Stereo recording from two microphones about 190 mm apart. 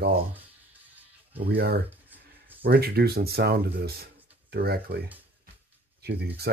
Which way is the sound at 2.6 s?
55° right (ahead or behind).